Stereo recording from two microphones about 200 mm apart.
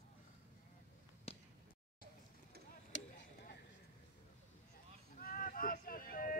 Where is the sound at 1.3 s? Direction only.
30° left (ahead or behind).